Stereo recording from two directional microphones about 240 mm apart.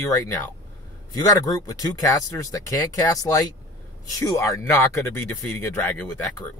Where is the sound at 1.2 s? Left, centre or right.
Centre.